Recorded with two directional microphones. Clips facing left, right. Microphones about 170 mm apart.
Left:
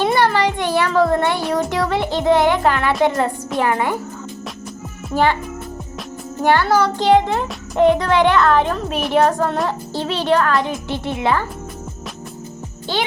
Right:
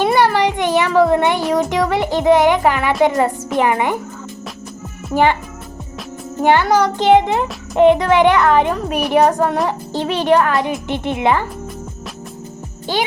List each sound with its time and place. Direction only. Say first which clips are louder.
0.0 s music: right 2 dB; 10° right (ahead or behind)
1.7 s a woman's voice: right 3 dB; 15° right (ahead or behind)
5.1 s a woman's voice: right 2 dB; 15° right (ahead or behind)
6.4 s a woman's voice: right 2 dB; 15° right (ahead or behind)
12.9 s a woman's voice: right 2 dB; 15° right (ahead or behind)